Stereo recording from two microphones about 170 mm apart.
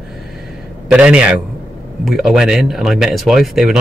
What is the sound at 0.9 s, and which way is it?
A man's voice, 5° right (ahead or behind).